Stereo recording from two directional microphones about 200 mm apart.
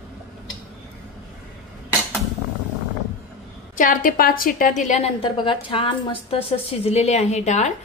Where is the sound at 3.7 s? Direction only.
45° left (ahead or behind).